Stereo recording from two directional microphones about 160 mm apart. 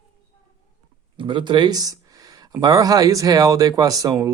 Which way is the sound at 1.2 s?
30° right (ahead or behind).